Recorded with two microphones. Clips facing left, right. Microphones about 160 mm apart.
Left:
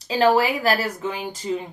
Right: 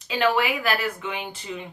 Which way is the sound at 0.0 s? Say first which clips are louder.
Left 5 dB; 35° left (ahead or behind).